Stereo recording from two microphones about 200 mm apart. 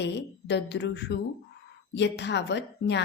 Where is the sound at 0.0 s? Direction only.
60° left (ahead or behind).